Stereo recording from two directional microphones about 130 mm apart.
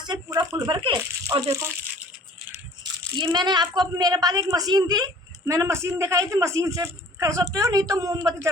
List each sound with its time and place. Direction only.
0.0 s speech: 35° right (ahead or behind)
0.7 s speech: 45° right (ahead or behind)
0.9 s speech: 25° right (ahead or behind)
3.2 s a woman's voice: 35° right (ahead or behind)